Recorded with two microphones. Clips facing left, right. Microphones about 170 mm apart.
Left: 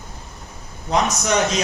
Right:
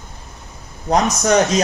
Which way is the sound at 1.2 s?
40° right (ahead or behind).